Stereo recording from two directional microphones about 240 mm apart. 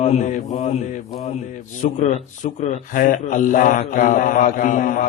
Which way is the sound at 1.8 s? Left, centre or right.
Left.